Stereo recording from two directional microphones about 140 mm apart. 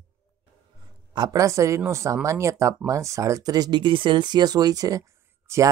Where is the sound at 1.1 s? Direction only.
25° right (ahead or behind).